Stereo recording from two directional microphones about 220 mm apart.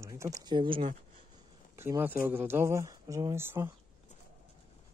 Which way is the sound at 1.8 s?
10° right (ahead or behind).